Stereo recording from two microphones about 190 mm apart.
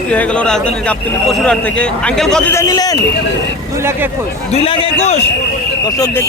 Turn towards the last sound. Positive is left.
turn(degrees=20)  # may be behind; listen again after turning